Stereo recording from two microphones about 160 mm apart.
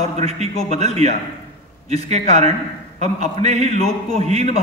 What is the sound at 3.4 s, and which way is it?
Speech, 40° right (ahead or behind).